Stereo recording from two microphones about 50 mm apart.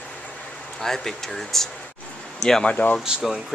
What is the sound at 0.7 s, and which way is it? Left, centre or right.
Speech, centre.